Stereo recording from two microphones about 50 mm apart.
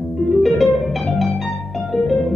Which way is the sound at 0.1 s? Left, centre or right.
Centre.